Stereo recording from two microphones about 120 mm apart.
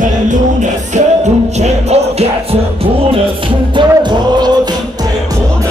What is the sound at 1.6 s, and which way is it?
Music, 65° right (ahead or behind).